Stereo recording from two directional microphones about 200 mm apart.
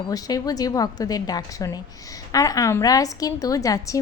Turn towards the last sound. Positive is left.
turn(degrees=15)  # may be behind; listen again after turning